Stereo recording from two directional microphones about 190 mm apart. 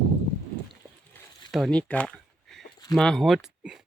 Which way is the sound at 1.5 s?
5° left (ahead or behind).